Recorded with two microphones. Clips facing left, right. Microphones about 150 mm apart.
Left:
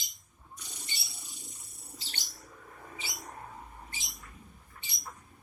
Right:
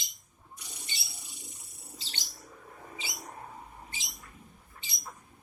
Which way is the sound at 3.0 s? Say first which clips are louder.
Right 1 dB; 20° right (ahead or behind).